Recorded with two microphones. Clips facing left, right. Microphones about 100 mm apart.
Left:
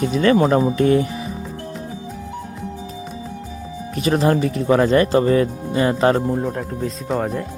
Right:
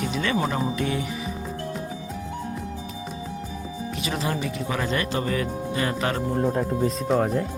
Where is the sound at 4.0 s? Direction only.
40° left (ahead or behind).